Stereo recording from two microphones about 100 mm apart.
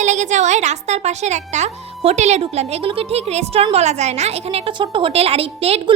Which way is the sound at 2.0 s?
85° right.